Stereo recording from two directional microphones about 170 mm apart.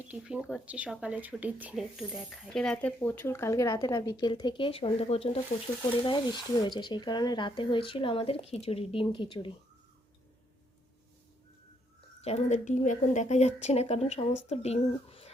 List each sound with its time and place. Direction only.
0.1 s speech: 5° right (ahead or behind); by 9.5 s 30° left (ahead or behind)
12.2 s speech: 40° left (ahead or behind)